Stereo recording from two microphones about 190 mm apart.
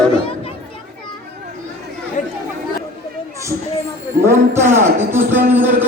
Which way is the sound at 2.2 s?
40° left (ahead or behind).